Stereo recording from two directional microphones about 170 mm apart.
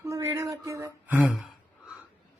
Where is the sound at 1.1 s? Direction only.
5° right (ahead or behind).